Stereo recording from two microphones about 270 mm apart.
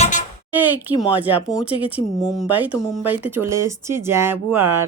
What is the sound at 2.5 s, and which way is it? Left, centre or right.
Speech, centre.